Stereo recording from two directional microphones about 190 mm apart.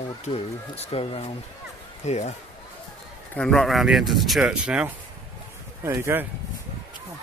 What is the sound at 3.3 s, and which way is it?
Speech, 5° left (ahead or behind).